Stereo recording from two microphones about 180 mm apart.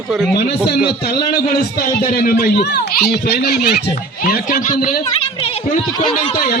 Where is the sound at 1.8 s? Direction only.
55° left (ahead or behind).